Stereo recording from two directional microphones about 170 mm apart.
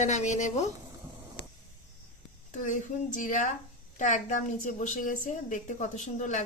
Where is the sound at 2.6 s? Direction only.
50° left (ahead or behind).